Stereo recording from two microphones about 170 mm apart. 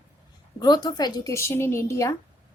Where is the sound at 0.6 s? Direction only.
25° left (ahead or behind).